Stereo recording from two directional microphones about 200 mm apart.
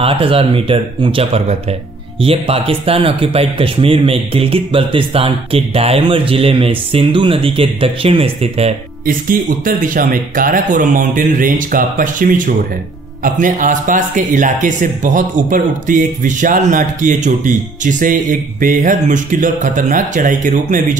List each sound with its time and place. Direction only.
0.0 s speech: 25° right (ahead or behind)
9.0 s speech: 45° right (ahead or behind)